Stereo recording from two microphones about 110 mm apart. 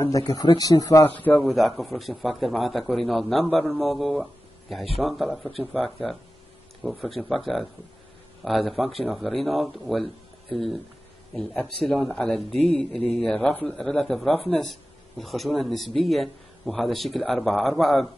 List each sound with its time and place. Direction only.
0.0 s speech: 35° left (ahead or behind)
1.0 s a man's voice: 15° left (ahead or behind)
1.4 s a man's voice: centre (ahead or behind)